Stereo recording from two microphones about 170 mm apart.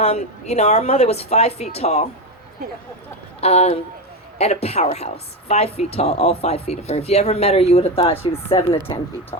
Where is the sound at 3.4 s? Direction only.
40° left (ahead or behind).